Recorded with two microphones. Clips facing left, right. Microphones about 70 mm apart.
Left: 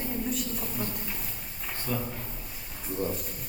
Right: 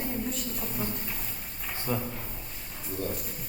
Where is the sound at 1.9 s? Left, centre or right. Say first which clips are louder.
Right 1 dB; centre.